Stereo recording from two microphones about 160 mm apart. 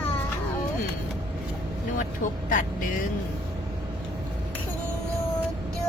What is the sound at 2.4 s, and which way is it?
Speech, 60° left (ahead or behind).